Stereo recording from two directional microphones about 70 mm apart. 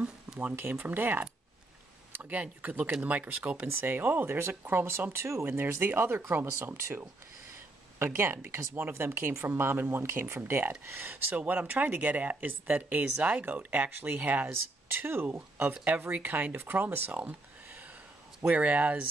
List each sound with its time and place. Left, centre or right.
0.0 s speech: centre
3.6 s speech: right
8.0 s speech: right
15.3 s speech: centre
17.3 s a sound: right
18.5 s speech: centre